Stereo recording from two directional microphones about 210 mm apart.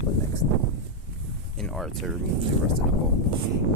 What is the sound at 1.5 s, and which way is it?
Speech, centre (ahead or behind).